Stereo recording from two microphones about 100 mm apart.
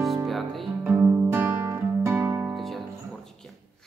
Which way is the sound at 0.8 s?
20° right (ahead or behind).